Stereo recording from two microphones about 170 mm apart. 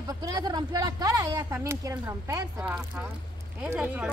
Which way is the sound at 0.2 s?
20° right (ahead or behind).